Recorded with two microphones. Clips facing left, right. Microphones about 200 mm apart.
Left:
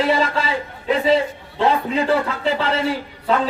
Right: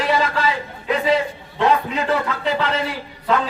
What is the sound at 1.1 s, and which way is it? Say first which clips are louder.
A man's voice: left 2 dB; 30° left (ahead or behind).